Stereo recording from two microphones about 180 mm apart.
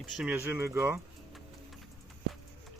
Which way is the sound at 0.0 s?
5° right (ahead or behind).